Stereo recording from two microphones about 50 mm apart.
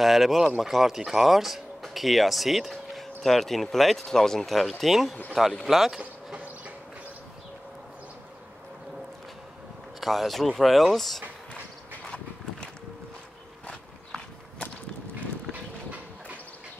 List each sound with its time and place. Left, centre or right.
0.0 s speech: centre
5.9 s a sound: right
9.9 s speech: centre